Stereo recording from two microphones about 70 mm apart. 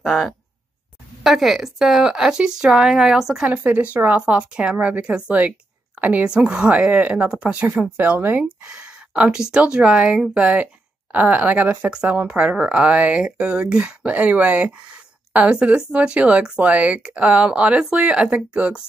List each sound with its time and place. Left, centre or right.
0.0 s speech: centre
1.2 s speech: centre
3.4 s speech: centre
8.6 s speech: centre